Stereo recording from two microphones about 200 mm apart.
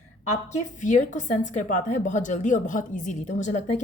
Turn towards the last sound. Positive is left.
turn(degrees=35)  # may be behind; listen again after turning